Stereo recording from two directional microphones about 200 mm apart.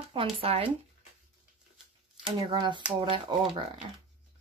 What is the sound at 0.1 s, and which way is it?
Speech, 30° right (ahead or behind).